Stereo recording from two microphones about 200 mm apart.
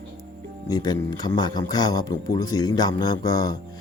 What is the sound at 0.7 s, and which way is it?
Speech, 20° left (ahead or behind).